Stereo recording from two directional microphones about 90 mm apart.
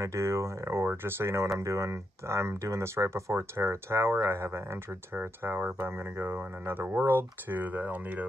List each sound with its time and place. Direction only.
0.0 s speech: 30° right (ahead or behind)